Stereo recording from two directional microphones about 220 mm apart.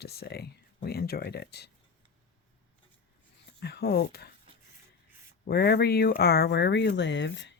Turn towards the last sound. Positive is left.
turn(degrees=55)  # may be behind; listen again after turning